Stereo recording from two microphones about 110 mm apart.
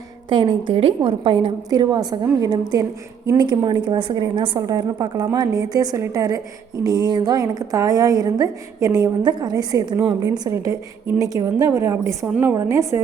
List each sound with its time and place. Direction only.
0.3 s a woman's voice: 45° right (ahead or behind)
10.5 s a woman's voice: 30° right (ahead or behind)